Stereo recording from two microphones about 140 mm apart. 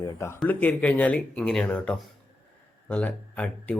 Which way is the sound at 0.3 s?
10° left (ahead or behind).